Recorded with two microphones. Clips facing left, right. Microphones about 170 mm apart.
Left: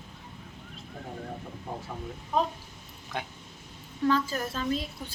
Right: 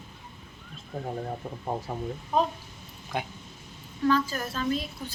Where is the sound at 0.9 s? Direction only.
40° right (ahead or behind).